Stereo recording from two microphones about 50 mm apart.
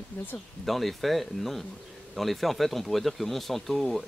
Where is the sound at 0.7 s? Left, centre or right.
Centre.